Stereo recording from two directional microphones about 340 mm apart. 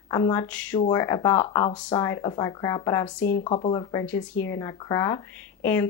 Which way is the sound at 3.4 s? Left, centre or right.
Centre.